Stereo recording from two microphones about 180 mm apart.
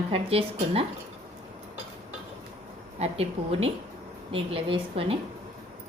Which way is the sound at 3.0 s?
30° right (ahead or behind).